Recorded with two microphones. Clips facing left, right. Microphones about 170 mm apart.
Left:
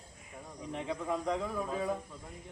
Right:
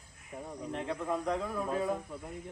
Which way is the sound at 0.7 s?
Centre (ahead or behind).